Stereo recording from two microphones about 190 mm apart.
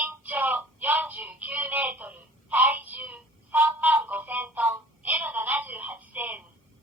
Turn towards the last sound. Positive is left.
turn(degrees=-10)  # may be behind; listen again after turning